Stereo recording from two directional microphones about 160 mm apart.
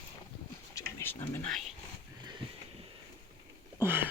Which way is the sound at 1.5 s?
Centre (ahead or behind).